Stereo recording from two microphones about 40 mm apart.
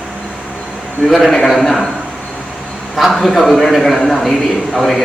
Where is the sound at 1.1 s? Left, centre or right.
Centre.